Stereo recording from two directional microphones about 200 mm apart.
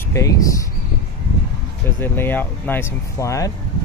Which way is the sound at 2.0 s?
10° left (ahead or behind).